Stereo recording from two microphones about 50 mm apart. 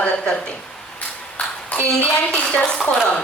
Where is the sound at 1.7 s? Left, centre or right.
Left.